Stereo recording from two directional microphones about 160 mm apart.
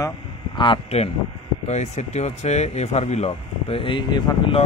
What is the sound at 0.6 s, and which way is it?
Speech, 35° left (ahead or behind).